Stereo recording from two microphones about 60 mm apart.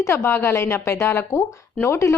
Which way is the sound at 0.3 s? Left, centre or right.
Left.